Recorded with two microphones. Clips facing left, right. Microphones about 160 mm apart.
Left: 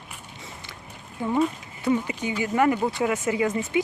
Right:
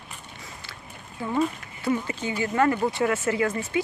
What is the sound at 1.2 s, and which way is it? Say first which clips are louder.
Speech: left 2 dB; 20° left (ahead or behind).